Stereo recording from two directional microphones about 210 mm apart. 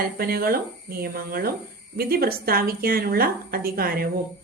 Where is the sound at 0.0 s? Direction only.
45° right (ahead or behind).